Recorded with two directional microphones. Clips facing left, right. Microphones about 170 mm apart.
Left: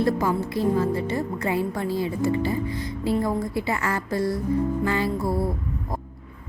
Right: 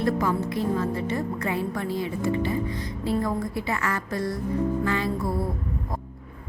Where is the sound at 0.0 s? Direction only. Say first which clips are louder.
Left 2 dB; 30° left (ahead or behind).